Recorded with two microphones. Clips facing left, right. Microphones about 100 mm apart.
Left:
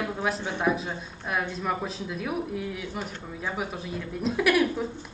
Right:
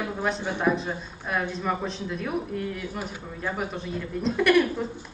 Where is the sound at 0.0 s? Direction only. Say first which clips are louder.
Right 1 dB; centre (ahead or behind).